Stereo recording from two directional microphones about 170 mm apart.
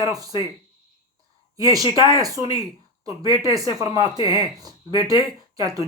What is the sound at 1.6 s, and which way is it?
Speech, 20° right (ahead or behind).